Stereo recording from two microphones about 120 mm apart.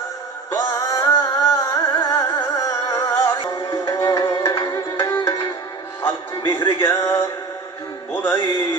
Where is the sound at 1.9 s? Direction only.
40° left (ahead or behind).